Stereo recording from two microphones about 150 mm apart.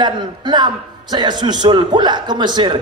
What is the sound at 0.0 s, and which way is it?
A man's voice, 30° right (ahead or behind).